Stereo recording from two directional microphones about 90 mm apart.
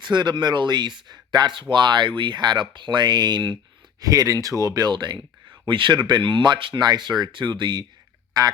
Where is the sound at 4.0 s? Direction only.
40° right (ahead or behind).